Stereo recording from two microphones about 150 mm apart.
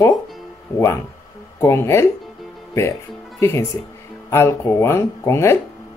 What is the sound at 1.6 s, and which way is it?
Speech, 20° left (ahead or behind).